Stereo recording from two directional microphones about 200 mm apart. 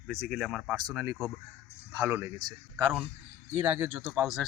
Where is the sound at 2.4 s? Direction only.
20° right (ahead or behind).